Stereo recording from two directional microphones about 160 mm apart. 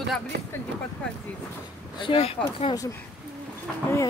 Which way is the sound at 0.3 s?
90° right.